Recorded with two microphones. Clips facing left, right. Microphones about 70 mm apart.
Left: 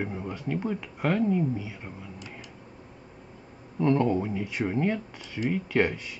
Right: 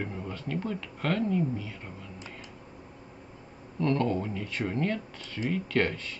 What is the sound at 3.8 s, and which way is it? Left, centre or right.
Speech, centre.